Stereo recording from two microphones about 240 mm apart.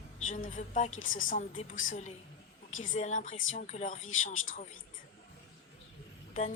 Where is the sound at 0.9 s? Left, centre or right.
Left.